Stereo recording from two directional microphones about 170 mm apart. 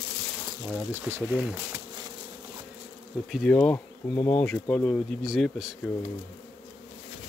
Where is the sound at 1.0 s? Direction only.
10° right (ahead or behind).